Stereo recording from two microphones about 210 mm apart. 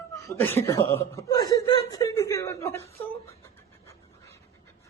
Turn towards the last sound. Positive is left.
turn(degrees=15)  # may be behind; listen again after turning